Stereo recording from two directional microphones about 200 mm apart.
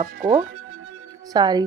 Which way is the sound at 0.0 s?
40° right (ahead or behind).